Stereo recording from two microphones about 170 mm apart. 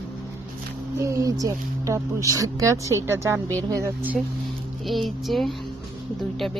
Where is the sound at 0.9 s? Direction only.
15° right (ahead or behind).